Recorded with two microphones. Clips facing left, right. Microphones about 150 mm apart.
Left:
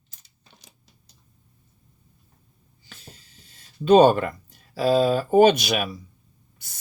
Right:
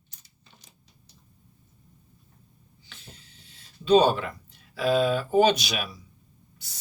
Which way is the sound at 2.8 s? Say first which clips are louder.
Left 2 dB; 40° left (ahead or behind).